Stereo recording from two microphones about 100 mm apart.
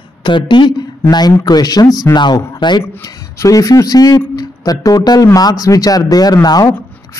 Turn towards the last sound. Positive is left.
turn(degrees=40)  # may be behind; listen again after turning